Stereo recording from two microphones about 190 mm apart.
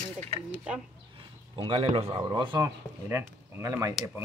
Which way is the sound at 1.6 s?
25° right (ahead or behind).